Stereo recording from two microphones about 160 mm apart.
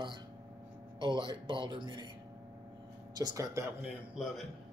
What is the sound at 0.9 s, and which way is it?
Speech, 30° right (ahead or behind).